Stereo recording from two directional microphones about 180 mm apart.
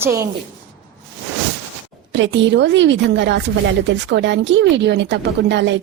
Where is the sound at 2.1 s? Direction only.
90° right.